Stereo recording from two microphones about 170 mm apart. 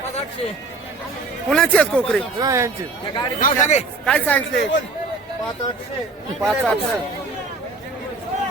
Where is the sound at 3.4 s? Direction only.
45° left (ahead or behind).